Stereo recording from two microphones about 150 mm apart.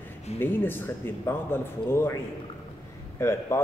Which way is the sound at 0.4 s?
15° left (ahead or behind).